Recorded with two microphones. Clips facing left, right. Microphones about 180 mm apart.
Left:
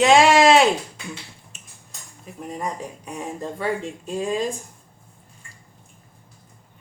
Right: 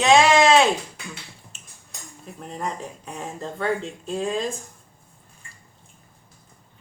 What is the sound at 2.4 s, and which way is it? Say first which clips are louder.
Speech: left 1 dB; 10° left (ahead or behind).